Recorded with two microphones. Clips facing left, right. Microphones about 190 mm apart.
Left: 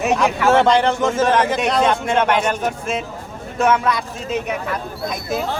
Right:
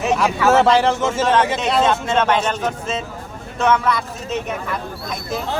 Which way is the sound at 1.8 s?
10° left (ahead or behind).